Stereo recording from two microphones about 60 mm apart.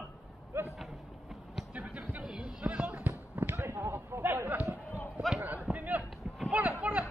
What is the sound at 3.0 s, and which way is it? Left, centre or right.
Basketball bounce, right.